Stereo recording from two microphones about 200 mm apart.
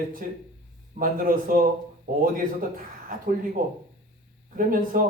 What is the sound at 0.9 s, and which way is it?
A man's voice, 45° right (ahead or behind).